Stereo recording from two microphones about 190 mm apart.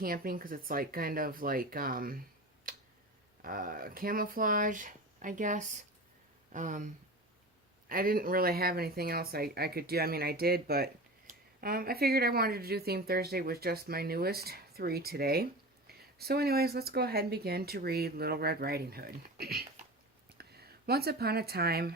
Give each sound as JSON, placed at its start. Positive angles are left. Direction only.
{"t": 0.0, "sound": "speech", "side_deg": -50}
{"t": 2.7, "sound": "tick-tock", "side_deg": -50}
{"t": 3.4, "sound": "speech", "side_deg": -50}